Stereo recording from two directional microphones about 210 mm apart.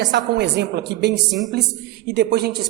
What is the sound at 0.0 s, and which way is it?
A woman's voice, 55° right (ahead or behind).